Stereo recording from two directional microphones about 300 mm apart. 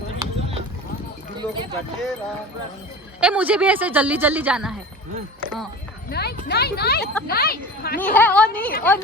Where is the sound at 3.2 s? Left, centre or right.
Centre.